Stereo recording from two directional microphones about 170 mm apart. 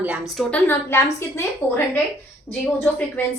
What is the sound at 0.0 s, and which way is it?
Speech, 5° right (ahead or behind).